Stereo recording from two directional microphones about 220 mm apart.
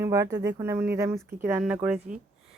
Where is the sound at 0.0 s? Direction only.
15° right (ahead or behind).